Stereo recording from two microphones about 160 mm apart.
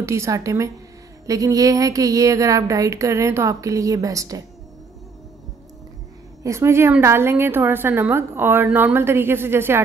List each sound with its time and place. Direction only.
0.0 s speech: 20° right (ahead or behind)
6.4 s a woman's voice: 15° right (ahead or behind)